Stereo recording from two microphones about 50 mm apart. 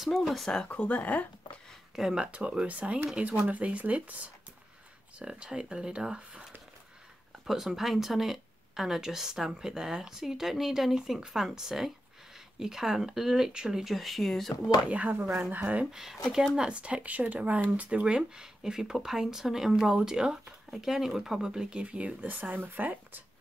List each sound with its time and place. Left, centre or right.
0.2 s speech: centre
0.7 s speech: left
2.1 s speech: right
5.2 s speech: centre
13.9 s speech: centre
14.9 s speech: right
15.9 s speech: centre
16.5 s speech: right
21.5 s speech: centre
21.8 s speech: right
22.3 s speech: right